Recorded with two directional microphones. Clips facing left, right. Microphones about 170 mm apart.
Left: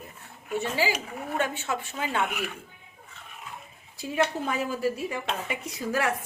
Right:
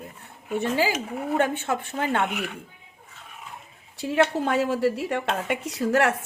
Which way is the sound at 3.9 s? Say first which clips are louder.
Right 5 dB; 75° right (ahead or behind).